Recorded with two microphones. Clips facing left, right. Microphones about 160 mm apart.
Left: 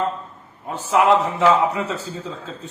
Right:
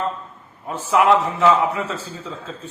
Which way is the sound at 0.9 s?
20° left (ahead or behind).